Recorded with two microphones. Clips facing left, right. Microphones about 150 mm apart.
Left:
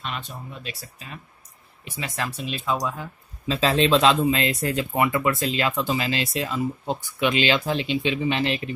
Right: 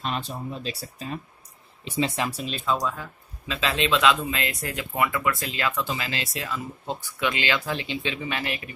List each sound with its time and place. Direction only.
0.0 s speech: 35° right (ahead or behind)
1.9 s speech: 25° right (ahead or behind)
2.4 s speech: 5° left (ahead or behind)
3.4 s speech: 35° left (ahead or behind)